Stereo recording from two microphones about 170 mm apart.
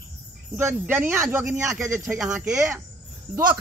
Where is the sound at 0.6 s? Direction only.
10° right (ahead or behind).